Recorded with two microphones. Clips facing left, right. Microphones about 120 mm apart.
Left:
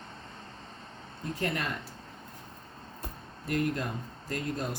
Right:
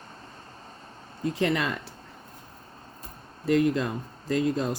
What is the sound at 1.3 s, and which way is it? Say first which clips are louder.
Speech: right 7 dB; 90° right.